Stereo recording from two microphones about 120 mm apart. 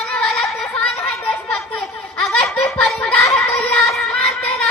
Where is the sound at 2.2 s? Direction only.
Centre (ahead or behind).